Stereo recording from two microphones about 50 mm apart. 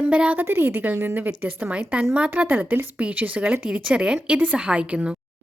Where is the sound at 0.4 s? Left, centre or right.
Right.